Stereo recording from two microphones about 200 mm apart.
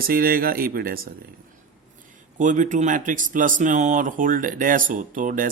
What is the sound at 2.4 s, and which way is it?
Speech, 40° right (ahead or behind).